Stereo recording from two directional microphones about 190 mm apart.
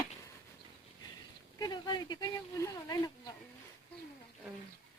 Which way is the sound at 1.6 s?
20° left (ahead or behind).